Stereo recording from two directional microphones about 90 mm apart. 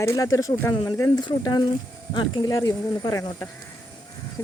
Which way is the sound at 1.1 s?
50° left (ahead or behind).